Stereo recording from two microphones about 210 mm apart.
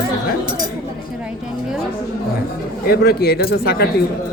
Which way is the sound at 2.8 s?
45° left (ahead or behind).